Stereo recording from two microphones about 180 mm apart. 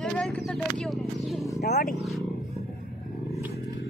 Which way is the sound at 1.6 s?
60° left (ahead or behind).